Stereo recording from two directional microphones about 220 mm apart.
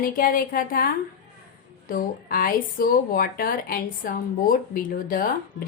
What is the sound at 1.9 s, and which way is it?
Speech, 40° left (ahead or behind).